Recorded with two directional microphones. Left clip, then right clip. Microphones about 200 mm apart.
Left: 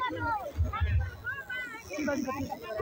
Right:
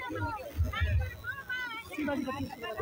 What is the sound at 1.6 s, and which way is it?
Children playing, 25° right (ahead or behind).